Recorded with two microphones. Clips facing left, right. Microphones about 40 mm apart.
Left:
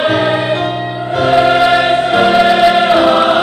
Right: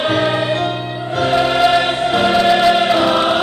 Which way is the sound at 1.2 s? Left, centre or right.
Centre.